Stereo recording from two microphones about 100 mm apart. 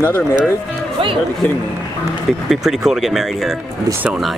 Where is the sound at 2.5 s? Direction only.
5° right (ahead or behind).